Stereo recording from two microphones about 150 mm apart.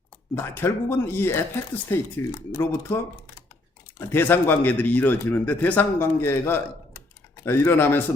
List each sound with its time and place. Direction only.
0.3 s speech: 15° left (ahead or behind)
4.0 s speech: 15° left (ahead or behind)